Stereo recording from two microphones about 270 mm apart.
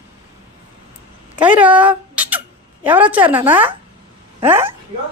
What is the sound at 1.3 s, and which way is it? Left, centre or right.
Speech, centre.